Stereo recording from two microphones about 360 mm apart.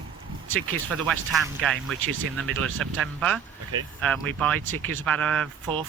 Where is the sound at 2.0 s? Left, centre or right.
Right.